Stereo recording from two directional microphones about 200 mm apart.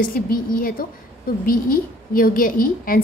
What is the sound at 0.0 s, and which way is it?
A woman's voice, 45° left (ahead or behind).